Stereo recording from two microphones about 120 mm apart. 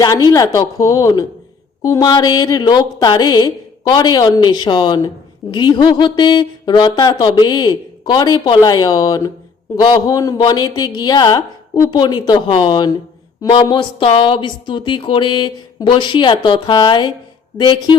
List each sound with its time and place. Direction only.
0.0 s a woman's voice: 30° left (ahead or behind)